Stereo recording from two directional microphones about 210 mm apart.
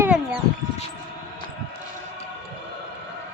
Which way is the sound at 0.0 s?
5° right (ahead or behind).